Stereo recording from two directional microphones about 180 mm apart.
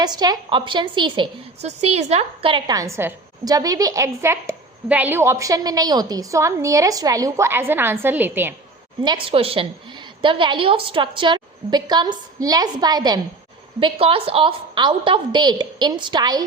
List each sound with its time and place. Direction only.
0.0 s a woman's voice: 20° right (ahead or behind)
9.0 s a woman's voice: 30° right (ahead or behind)